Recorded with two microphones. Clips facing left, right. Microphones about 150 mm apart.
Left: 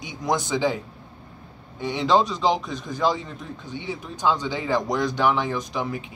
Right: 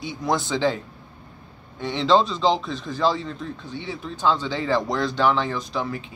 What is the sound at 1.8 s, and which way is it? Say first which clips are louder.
A man's voice: right 1 dB; 10° left (ahead or behind).